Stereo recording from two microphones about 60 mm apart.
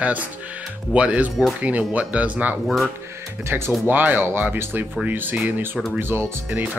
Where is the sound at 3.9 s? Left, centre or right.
Right.